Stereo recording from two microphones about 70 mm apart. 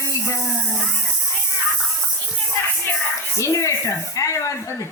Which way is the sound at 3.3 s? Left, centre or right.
Left.